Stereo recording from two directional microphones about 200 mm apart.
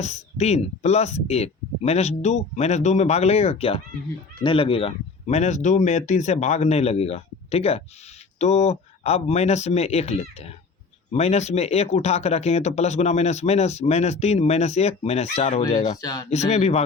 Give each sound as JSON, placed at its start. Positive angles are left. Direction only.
{"t": 0.0, "sound": "speech", "side_deg": 35}
{"t": 16.0, "sound": "speech", "side_deg": 20}
{"t": 16.5, "sound": "speech", "side_deg": 35}